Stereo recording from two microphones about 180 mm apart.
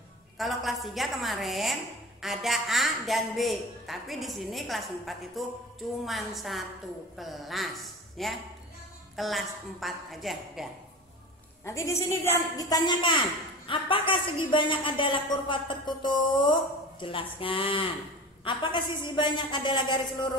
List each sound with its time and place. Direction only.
0.4 s a woman's voice: centre (ahead or behind)
11.6 s a woman's voice: 15° left (ahead or behind)